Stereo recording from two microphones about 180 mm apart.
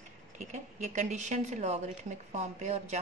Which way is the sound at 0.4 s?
40° right (ahead or behind).